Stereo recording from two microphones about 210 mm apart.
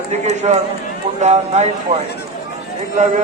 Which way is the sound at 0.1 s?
30° right (ahead or behind).